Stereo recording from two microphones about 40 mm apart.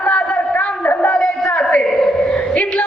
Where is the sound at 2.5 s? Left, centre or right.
Left.